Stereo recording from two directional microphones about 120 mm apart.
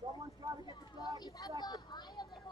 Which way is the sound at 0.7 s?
35° left (ahead or behind).